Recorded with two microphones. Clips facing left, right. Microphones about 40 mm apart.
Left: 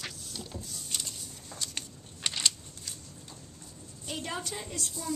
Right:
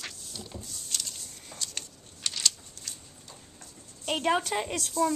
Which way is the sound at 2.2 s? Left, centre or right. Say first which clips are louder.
Even; centre.